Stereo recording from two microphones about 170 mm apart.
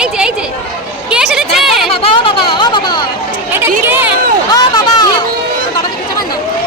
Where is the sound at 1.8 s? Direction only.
30° left (ahead or behind).